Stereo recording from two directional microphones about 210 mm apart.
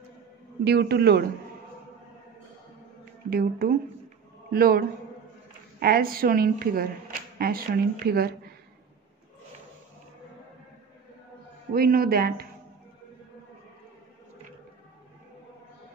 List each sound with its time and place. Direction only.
0.7 s speech: 50° right (ahead or behind)
3.3 s speech: 45° right (ahead or behind)
11.7 s speech: 45° right (ahead or behind)